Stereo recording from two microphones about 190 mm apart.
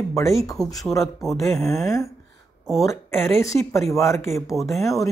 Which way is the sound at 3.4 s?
15° left (ahead or behind).